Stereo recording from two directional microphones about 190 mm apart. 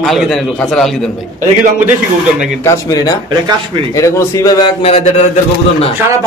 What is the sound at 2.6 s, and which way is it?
Speech, 20° left (ahead or behind).